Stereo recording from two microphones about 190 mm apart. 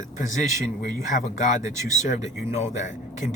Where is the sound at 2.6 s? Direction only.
40° left (ahead or behind).